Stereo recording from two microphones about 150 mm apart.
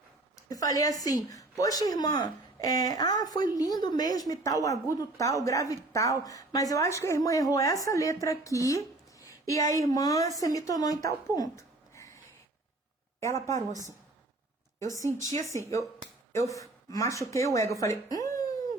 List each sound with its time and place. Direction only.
0.4 s a woman's voice: 25° left (ahead or behind)
13.2 s a woman's voice: 20° left (ahead or behind)
14.8 s a woman's voice: 20° left (ahead or behind)